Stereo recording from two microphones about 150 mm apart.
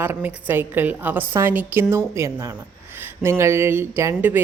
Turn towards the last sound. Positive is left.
turn(degrees=-15)  # may be behind; listen again after turning